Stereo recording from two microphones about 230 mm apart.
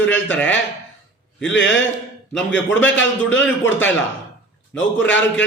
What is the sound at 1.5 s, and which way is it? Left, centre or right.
Speech, left.